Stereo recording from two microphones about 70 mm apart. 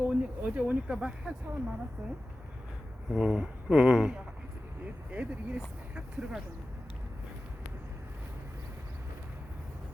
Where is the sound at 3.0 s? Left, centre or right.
Centre.